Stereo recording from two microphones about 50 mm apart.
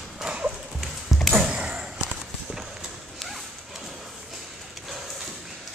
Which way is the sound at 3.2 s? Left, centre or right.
Centre.